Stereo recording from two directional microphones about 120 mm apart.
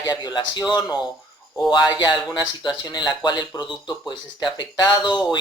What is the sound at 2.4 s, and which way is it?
Speech, 35° left (ahead or behind).